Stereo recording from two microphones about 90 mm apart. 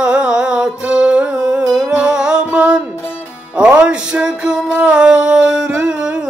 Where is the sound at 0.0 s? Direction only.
10° right (ahead or behind).